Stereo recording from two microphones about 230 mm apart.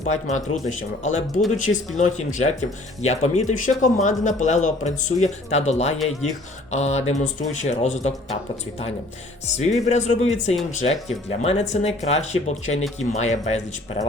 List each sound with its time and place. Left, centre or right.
0.0 s speech: left
9.6 s speech: left